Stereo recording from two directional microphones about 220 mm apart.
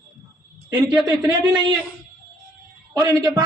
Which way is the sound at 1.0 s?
20° right (ahead or behind).